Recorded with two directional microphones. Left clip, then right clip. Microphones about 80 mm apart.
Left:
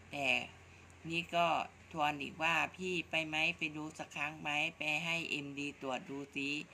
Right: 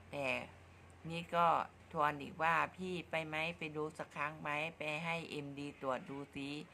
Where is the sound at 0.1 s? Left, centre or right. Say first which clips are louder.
Left 5 dB; right.